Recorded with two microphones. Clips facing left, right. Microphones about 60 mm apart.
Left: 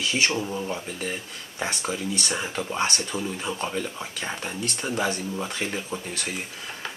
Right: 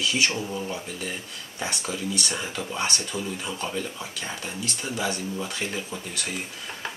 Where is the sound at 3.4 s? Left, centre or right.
Left.